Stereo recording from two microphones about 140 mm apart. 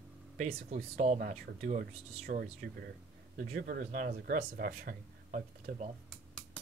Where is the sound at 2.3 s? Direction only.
80° right.